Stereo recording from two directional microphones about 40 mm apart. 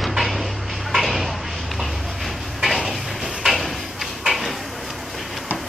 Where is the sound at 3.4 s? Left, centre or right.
Centre.